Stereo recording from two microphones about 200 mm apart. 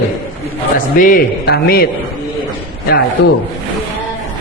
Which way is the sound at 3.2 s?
55° left (ahead or behind).